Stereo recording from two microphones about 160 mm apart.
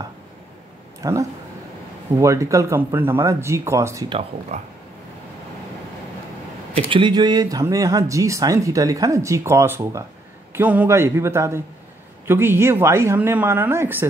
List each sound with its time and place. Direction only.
1.0 s speech: 20° right (ahead or behind)
4.1 s speech: 35° right (ahead or behind)
6.7 s speech: 30° right (ahead or behind); by 14.0 s 15° right (ahead or behind)